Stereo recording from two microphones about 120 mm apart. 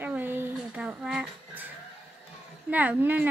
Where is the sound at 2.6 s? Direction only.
15° right (ahead or behind).